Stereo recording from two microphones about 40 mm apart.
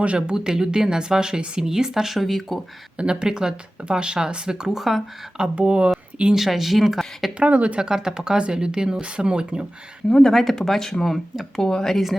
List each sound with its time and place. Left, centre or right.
0.2 s speech: centre
3.0 s speech: right
5.4 s speech: right
6.3 s speech: centre
7.3 s speech: right
7.8 s speech: centre
10.2 s speech: centre